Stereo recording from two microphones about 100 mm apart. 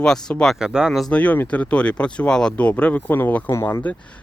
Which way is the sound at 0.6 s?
5° right (ahead or behind).